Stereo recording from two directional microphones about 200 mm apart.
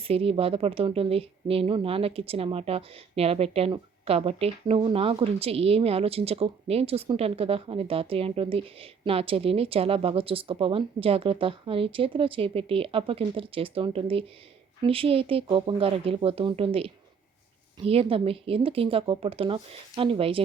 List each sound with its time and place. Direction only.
0.0 s a woman's voice: 30° right (ahead or behind)